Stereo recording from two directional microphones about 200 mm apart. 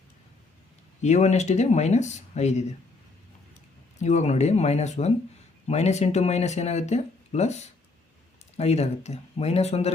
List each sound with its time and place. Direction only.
1.0 s speech: 35° left (ahead or behind)
4.0 s speech: 35° left (ahead or behind)